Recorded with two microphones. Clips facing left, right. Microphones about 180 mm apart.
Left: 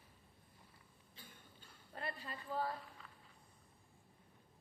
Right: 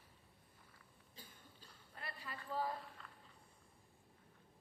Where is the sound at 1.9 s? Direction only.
30° left (ahead or behind).